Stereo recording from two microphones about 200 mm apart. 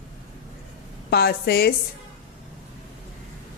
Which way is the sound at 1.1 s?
50° left (ahead or behind).